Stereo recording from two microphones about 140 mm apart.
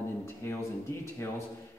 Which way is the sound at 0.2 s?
20° left (ahead or behind).